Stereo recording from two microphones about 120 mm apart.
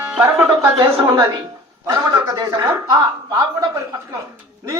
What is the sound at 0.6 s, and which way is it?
A man's voice, 25° right (ahead or behind).